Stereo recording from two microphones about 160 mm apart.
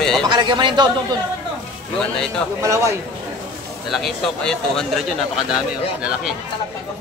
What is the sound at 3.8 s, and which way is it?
Speech, centre (ahead or behind).